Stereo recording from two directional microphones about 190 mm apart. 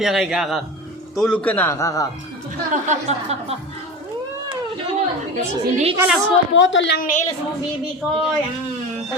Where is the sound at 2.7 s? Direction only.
35° right (ahead or behind).